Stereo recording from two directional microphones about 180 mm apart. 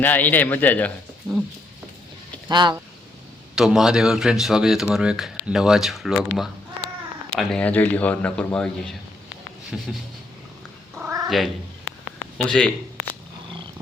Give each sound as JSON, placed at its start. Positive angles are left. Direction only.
{"t": 0.0, "sound": "a man's voice", "side_deg": 10}
{"t": 2.5, "sound": "speech", "side_deg": -25}
{"t": 3.5, "sound": "a man's voice", "side_deg": 0}
{"t": 10.9, "sound": "cat", "side_deg": -15}
{"t": 11.3, "sound": "speech", "side_deg": 0}